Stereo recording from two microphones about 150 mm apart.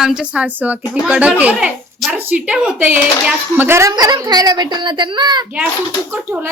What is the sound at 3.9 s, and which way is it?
A woman's voice, 25° right (ahead or behind).